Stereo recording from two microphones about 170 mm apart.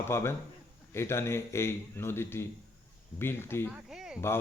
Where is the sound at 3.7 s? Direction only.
5° right (ahead or behind).